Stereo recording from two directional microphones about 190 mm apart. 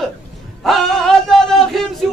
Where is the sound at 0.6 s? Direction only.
Centre (ahead or behind).